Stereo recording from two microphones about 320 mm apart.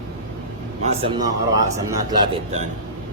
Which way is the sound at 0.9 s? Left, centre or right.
Centre.